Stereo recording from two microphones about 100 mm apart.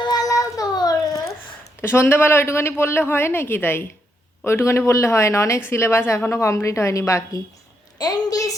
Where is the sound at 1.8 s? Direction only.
25° left (ahead or behind).